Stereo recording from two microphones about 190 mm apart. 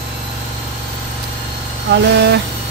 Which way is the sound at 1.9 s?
60° right (ahead or behind).